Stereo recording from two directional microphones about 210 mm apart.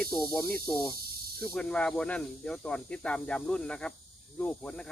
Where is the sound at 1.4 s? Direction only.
5° left (ahead or behind).